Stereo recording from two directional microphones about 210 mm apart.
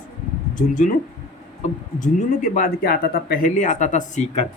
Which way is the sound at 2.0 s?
35° left (ahead or behind).